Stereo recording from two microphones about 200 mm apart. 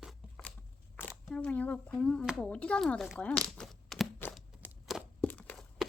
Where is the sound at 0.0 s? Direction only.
Centre (ahead or behind).